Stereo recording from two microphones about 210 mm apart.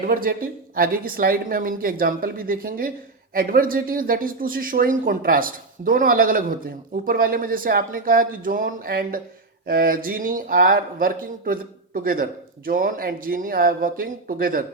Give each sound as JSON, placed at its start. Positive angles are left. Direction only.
{"t": 0.1, "sound": "speech", "side_deg": -45}